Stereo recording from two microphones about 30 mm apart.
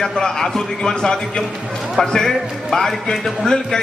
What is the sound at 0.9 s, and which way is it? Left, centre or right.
Speech, left.